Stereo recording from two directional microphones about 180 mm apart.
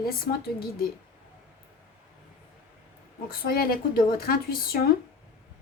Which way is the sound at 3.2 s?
55° left (ahead or behind).